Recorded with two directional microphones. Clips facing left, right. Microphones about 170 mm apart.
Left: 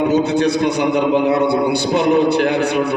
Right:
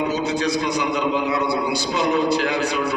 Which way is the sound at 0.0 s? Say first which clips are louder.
Left 7 dB; 60° left (ahead or behind).